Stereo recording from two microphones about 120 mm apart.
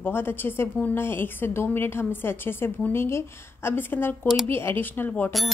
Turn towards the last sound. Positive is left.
turn(degrees=15)  # may be behind; listen again after turning